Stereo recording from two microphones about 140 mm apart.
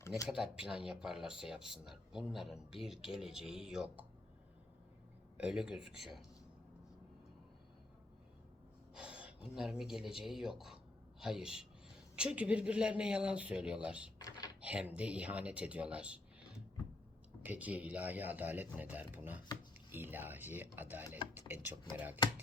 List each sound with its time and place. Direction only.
0.3 s speech: 5° right (ahead or behind)
5.4 s speech: 5° right (ahead or behind)
9.0 s speech: 5° right (ahead or behind)
14.2 s typing: 25° left (ahead or behind)
14.6 s speech: 10° right (ahead or behind)
17.4 s speech: 10° right (ahead or behind)